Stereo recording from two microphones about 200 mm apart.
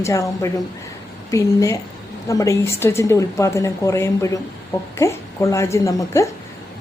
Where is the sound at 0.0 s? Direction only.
15° left (ahead or behind).